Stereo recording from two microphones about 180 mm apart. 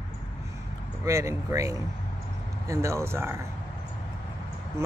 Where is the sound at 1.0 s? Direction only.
15° right (ahead or behind).